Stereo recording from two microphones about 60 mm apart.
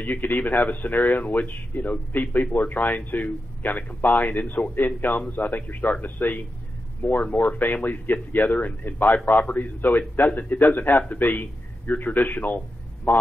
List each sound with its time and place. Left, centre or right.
0.0 s a man's voice: left